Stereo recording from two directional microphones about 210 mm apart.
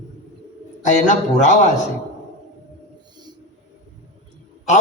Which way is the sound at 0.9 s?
35° left (ahead or behind).